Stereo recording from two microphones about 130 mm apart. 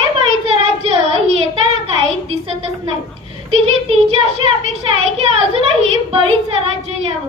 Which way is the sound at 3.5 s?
50° right (ahead or behind).